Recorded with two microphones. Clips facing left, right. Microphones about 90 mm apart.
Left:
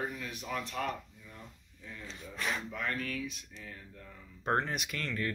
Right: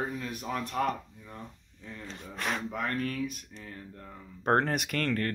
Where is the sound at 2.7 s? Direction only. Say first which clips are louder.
Right 5 dB; 40° right (ahead or behind).